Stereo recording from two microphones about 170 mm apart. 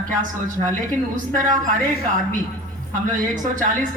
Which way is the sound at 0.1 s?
50° right (ahead or behind).